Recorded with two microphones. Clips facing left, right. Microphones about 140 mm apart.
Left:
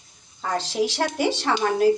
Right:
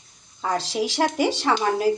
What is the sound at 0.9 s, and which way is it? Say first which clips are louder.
Speech: right 2 dB; 5° right (ahead or behind).